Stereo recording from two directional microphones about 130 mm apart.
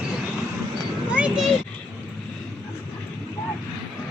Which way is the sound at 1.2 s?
10° right (ahead or behind).